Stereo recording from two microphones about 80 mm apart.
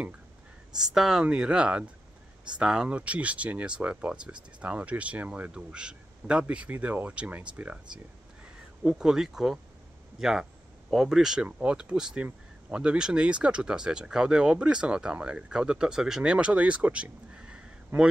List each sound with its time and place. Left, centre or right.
0.9 s speech: centre